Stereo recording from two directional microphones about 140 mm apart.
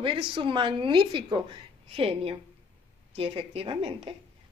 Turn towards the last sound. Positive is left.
turn(degrees=-40)  # may be behind; listen again after turning